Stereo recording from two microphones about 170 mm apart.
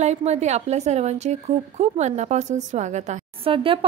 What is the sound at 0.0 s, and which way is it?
A woman's voice, 40° right (ahead or behind).